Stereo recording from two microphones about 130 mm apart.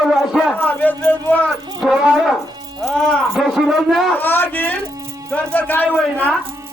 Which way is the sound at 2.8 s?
5° left (ahead or behind).